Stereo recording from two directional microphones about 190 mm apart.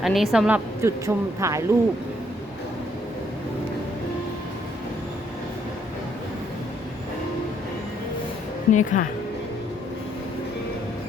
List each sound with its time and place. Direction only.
0.0 s speech: centre (ahead or behind)
8.7 s a woman's voice: 40° left (ahead or behind)